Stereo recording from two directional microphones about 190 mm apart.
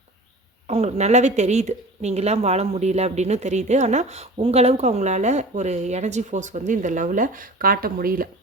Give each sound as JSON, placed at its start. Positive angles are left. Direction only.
{"t": 0.7, "sound": "speech", "side_deg": -35}